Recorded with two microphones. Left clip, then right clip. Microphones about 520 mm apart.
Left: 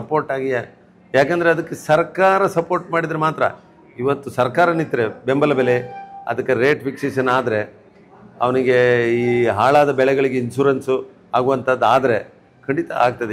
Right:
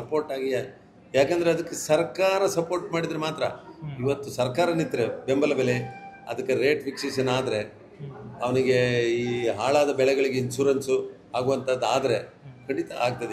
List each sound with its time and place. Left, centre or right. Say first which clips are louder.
0.1 s speech: left 7 dB; left